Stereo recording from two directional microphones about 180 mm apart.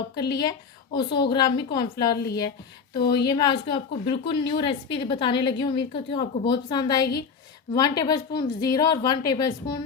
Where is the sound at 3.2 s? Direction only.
20° left (ahead or behind).